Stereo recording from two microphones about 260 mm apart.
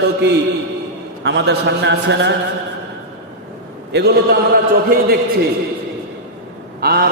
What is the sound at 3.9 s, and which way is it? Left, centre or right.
Speech, right.